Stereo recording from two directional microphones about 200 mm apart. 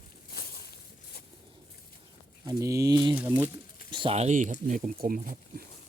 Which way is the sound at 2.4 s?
15° right (ahead or behind).